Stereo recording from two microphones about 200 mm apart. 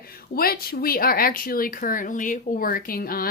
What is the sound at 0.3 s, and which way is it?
Speech, 50° left (ahead or behind).